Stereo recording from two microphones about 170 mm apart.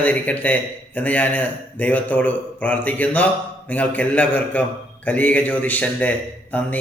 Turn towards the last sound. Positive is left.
turn(degrees=10)  # may be behind; listen again after turning